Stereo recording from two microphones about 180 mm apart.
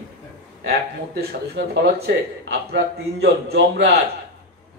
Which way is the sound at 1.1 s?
65° right (ahead or behind).